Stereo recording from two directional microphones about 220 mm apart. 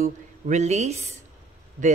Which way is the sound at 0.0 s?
30° right (ahead or behind).